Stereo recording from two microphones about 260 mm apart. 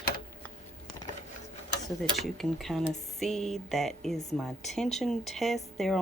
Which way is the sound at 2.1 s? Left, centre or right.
Centre.